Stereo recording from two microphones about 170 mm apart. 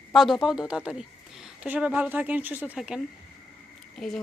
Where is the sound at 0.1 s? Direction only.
Centre (ahead or behind).